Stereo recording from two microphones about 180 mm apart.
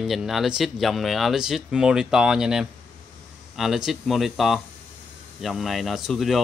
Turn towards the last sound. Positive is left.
turn(degrees=0)  # may be behind; listen again after turning